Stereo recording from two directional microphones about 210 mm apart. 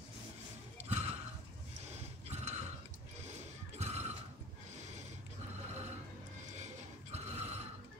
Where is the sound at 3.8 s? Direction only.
30° right (ahead or behind).